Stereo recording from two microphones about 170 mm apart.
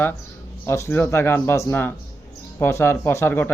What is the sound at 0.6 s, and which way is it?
Speech, 15° left (ahead or behind).